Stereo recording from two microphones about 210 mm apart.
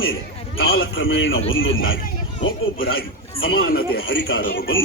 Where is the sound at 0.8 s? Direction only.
65° left (ahead or behind).